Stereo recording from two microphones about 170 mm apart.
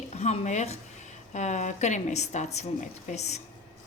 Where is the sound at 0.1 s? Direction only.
40° left (ahead or behind).